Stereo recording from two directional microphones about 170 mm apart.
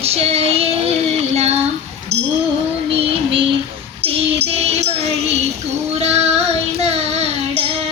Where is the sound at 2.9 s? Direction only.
35° right (ahead or behind).